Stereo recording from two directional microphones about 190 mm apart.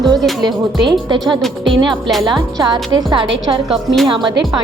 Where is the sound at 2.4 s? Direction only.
20° right (ahead or behind).